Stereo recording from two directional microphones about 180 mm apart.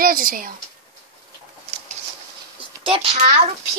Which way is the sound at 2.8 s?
30° right (ahead or behind).